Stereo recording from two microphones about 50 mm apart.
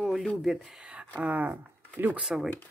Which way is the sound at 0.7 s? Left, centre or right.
Right.